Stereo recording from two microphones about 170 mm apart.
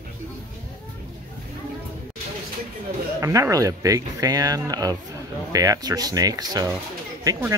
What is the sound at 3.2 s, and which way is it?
Speech, 20° right (ahead or behind).